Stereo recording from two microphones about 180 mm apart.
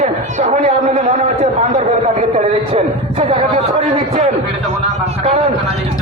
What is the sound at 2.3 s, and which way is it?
Speech, 35° right (ahead or behind).